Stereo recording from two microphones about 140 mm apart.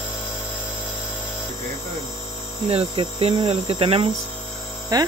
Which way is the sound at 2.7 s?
45° right (ahead or behind).